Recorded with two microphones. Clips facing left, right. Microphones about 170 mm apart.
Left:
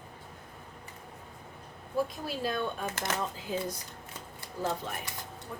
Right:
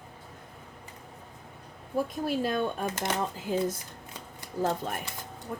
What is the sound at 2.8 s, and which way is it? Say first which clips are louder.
Speech: right 4 dB; 20° right (ahead or behind).